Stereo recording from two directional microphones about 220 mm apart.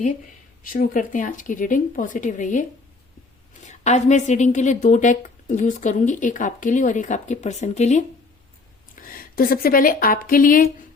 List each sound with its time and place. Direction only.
0.6 s a woman's voice: 40° left (ahead or behind)
3.7 s a woman's voice: 30° left (ahead or behind)